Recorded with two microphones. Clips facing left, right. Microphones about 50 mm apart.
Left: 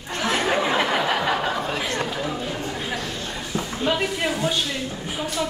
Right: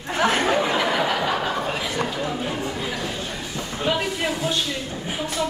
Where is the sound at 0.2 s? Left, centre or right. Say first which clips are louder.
Right 3 dB; right.